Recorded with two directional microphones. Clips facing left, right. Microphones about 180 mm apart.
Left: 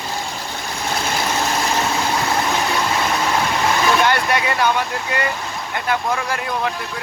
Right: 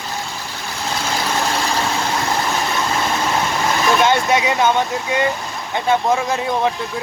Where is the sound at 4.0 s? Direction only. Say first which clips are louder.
Right 3 dB; 20° right (ahead or behind).